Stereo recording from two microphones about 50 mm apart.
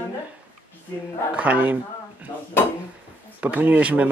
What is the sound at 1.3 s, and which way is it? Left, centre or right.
Speech, right.